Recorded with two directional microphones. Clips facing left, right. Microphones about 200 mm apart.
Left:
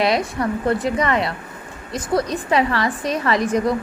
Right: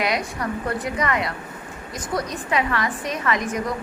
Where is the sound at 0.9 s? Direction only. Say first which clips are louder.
Left 4 dB; 25° left (ahead or behind).